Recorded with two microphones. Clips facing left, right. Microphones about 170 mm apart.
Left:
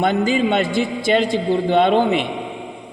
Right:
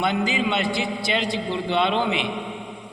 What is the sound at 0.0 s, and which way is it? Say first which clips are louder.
A man's voice: left 6 dB; 45° left (ahead or behind).